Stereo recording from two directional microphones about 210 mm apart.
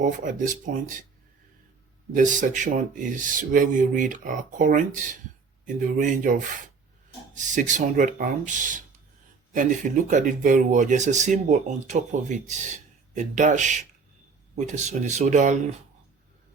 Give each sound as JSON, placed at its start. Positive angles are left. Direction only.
{"t": 0.0, "sound": "speech", "side_deg": -40}
{"t": 2.1, "sound": "speech", "side_deg": -40}
{"t": 7.3, "sound": "speech", "side_deg": -35}